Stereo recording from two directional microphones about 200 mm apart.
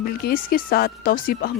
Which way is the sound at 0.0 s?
50° left (ahead or behind).